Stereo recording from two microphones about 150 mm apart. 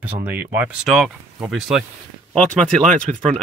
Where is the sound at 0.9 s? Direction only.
Centre (ahead or behind).